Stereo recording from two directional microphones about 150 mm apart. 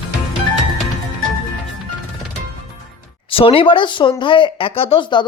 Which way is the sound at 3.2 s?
35° left (ahead or behind).